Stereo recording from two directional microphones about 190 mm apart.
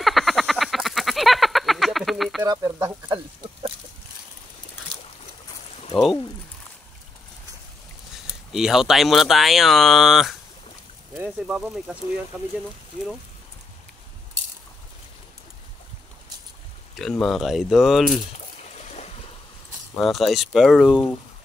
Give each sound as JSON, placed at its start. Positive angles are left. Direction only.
{"t": 0.0, "sound": "frog", "side_deg": 0}
{"t": 2.4, "sound": "speech", "side_deg": -20}
{"t": 5.9, "sound": "speech", "side_deg": 0}
{"t": 8.5, "sound": "speech", "side_deg": 0}
{"t": 16.9, "sound": "speech", "side_deg": 0}
{"t": 18.9, "sound": "a sound", "side_deg": 35}
{"t": 20.0, "sound": "speech", "side_deg": 0}